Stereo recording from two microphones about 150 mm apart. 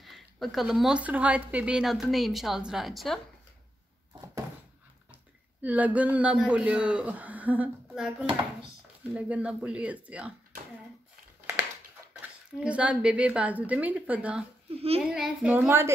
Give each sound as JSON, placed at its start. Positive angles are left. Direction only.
{"t": 0.0, "sound": "speech", "side_deg": 0}
{"t": 5.6, "sound": "a man's voice", "side_deg": -10}
{"t": 12.1, "sound": "speech", "side_deg": -10}
{"t": 14.7, "sound": "a child's voice", "side_deg": -40}
{"t": 15.0, "sound": "speech", "side_deg": 0}
{"t": 15.5, "sound": "a man's voice", "side_deg": -15}